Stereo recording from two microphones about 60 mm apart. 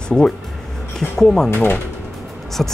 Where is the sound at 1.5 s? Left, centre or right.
Left.